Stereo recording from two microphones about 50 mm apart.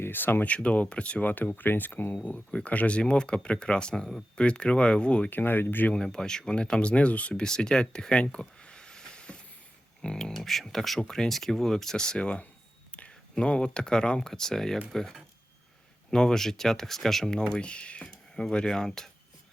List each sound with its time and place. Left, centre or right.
0.0 s speech: left
0.4 s speech: left
2.5 s speech: left
5.3 s speech: left
5.9 s speech: centre
7.4 s speech: centre
8.2 s a sound: left
10.0 s speech: centre
10.3 s speech: centre